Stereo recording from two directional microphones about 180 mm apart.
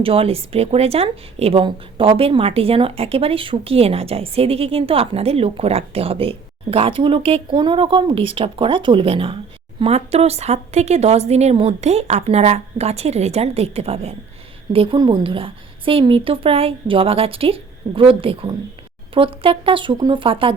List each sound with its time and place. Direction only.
0.0 s speech: 30° right (ahead or behind)